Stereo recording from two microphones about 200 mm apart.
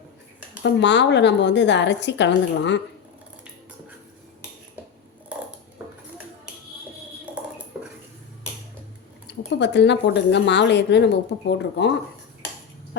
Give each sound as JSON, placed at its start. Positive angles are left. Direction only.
{"t": 0.6, "sound": "a woman's voice", "side_deg": 60}
{"t": 7.3, "sound": "a sound", "side_deg": -5}
{"t": 9.6, "sound": "a woman's voice", "side_deg": 60}